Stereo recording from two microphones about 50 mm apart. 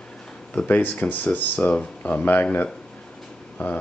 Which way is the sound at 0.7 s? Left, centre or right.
Left.